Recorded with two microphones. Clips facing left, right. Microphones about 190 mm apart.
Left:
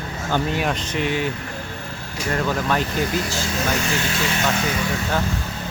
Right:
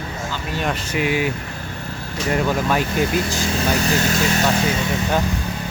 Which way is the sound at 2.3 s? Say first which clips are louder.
Right 2 dB; 10° right (ahead or behind).